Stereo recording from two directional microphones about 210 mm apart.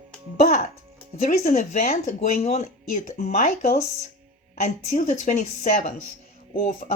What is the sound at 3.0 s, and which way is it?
Speech, 40° left (ahead or behind).